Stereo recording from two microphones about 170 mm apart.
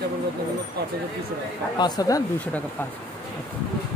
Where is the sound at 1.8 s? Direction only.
25° left (ahead or behind).